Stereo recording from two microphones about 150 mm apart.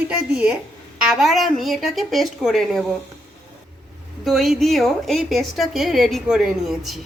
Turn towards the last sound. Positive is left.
turn(degrees=0)  # may be behind; listen again after turning